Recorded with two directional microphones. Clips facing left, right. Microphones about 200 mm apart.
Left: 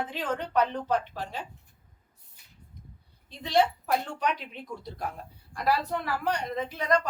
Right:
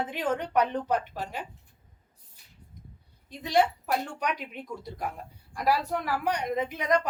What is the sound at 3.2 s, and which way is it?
A woman's voice, 15° right (ahead or behind).